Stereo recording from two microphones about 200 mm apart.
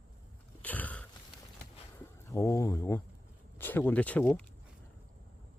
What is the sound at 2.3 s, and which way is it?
Speech, 15° left (ahead or behind).